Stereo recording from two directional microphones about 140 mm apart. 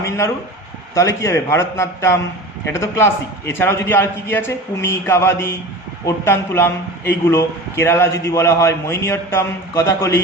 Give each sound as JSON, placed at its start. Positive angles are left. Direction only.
{"t": 0.9, "sound": "a man's voice", "side_deg": 20}